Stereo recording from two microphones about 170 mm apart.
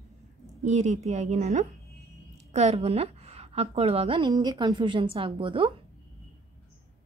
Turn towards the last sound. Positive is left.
turn(degrees=-30)  # may be behind; listen again after turning